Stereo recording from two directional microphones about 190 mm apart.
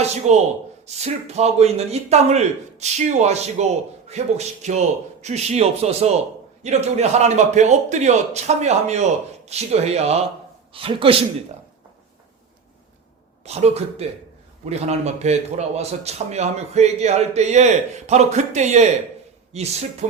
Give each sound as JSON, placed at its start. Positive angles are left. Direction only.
{"t": 0.0, "sound": "a man's voice", "side_deg": -35}
{"t": 13.4, "sound": "a man's voice", "side_deg": -35}